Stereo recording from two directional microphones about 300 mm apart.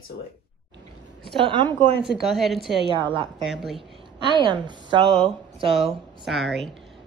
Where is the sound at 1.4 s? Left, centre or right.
Centre.